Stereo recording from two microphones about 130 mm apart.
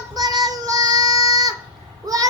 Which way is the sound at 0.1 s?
30° right (ahead or behind).